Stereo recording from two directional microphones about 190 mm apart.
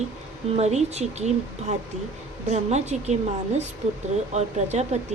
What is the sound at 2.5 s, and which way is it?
Speech, 35° right (ahead or behind).